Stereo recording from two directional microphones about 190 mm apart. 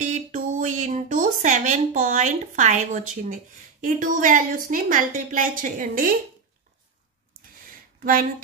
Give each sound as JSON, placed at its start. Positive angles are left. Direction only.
{"t": 0.0, "sound": "a sound", "side_deg": -40}
{"t": 3.8, "sound": "a woman's voice", "side_deg": -45}
{"t": 8.0, "sound": "speech", "side_deg": -45}